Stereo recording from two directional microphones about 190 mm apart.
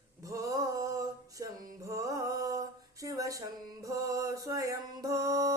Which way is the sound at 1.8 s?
15° right (ahead or behind).